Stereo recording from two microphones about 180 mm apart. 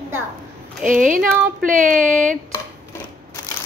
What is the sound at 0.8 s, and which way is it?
Speech, 45° right (ahead or behind).